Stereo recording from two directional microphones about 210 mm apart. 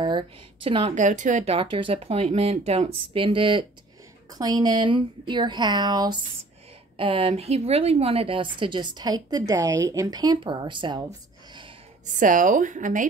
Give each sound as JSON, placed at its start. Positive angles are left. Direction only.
{"t": 0.7, "sound": "a woman's voice", "side_deg": -25}
{"t": 12.2, "sound": "a woman's voice", "side_deg": -40}